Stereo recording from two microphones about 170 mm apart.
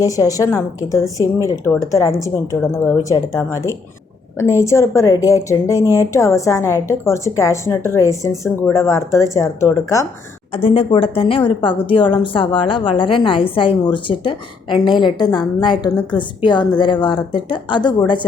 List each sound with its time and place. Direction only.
0.0 s a woman's voice: 20° left (ahead or behind)
10.5 s speech: 35° left (ahead or behind)